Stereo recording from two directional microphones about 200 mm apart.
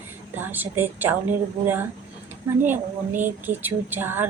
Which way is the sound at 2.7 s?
10° right (ahead or behind).